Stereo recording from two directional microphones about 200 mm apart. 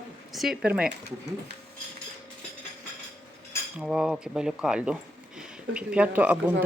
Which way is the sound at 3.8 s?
5° right (ahead or behind).